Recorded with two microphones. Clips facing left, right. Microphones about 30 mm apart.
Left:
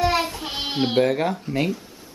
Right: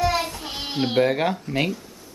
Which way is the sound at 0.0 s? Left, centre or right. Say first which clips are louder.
Left 2 dB; centre.